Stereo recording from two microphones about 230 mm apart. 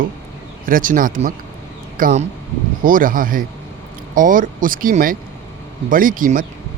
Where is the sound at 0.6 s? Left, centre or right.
Right.